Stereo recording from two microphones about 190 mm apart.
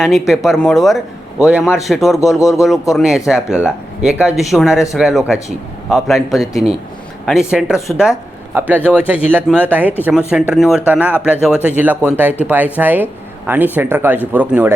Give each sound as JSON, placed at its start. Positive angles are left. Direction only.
{"t": 0.0, "sound": "a man's voice", "side_deg": 0}
{"t": 4.7, "sound": "speech", "side_deg": 15}
{"t": 4.9, "sound": "a man's voice", "side_deg": -5}